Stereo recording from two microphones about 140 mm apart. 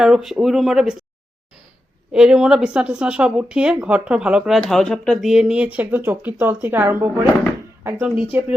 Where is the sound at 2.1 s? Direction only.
5° right (ahead or behind).